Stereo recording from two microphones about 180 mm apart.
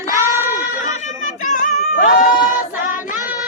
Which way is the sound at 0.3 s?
15° right (ahead or behind).